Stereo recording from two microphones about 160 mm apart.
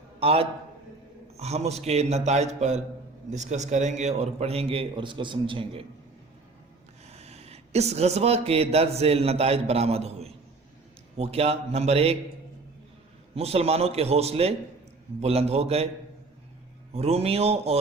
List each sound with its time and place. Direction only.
0.2 s a man's voice: 35° right (ahead or behind)
7.1 s a man's voice: 40° right (ahead or behind)
13.3 s a man's voice: 40° right (ahead or behind)
16.9 s a man's voice: 40° right (ahead or behind)